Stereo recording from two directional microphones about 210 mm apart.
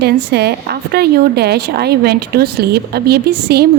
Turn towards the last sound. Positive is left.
turn(degrees=-50)  # may be behind; listen again after turning